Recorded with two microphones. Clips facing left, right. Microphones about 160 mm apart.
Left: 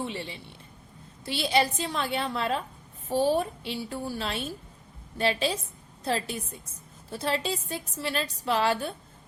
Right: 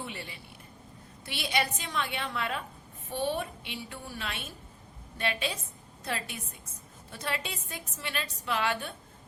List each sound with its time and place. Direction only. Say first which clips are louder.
0.0 s a woman's voice: left 7 dB; 25° left (ahead or behind)